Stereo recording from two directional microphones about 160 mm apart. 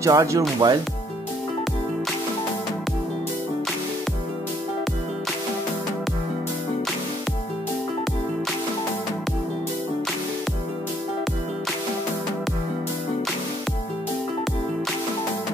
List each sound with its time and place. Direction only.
0.0 s speech: 20° right (ahead or behind)